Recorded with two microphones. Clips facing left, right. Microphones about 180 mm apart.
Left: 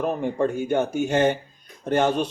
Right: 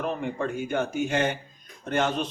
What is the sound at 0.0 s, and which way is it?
Speech, 45° left (ahead or behind).